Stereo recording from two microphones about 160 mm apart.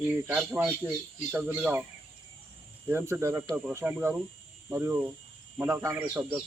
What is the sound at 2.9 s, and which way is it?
Speech, 15° right (ahead or behind).